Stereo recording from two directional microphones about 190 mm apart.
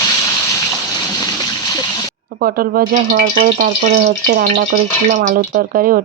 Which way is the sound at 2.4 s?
50° right (ahead or behind).